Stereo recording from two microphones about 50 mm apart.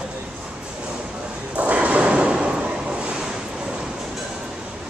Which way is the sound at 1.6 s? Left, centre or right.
Right.